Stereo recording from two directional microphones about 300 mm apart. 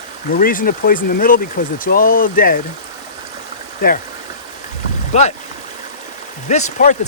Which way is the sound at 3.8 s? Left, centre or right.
Left.